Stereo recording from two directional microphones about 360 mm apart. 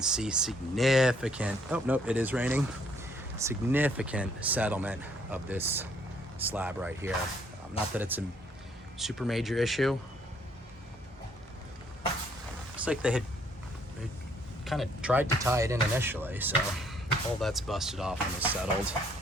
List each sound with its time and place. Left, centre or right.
0.0 s speech: centre
12.7 s speech: centre
14.6 s speech: centre